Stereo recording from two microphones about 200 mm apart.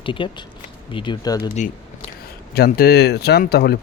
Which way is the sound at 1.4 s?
40° left (ahead or behind).